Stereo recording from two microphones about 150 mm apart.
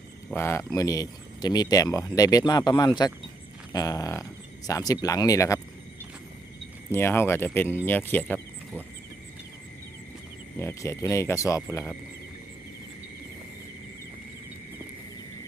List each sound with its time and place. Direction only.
0.3 s speech: 15° left (ahead or behind)
6.9 s speech: 15° left (ahead or behind)
10.6 s speech: 20° left (ahead or behind)